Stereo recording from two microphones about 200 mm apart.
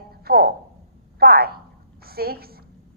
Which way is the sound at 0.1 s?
50° right (ahead or behind).